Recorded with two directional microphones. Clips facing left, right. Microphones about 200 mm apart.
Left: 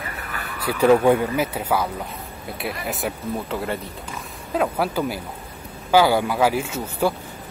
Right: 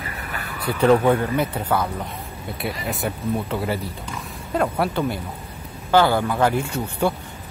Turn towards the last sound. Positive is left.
turn(degrees=5)  # may be behind; listen again after turning